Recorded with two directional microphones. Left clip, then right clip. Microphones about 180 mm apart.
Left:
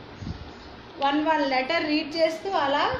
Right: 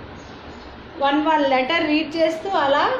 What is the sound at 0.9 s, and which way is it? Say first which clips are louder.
A woman's voice: right 5 dB; 5° right (ahead or behind).